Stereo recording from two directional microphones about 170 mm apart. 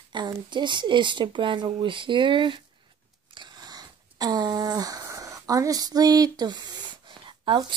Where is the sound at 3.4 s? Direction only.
25° right (ahead or behind).